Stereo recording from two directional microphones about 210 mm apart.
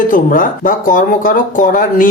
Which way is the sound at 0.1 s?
40° left (ahead or behind).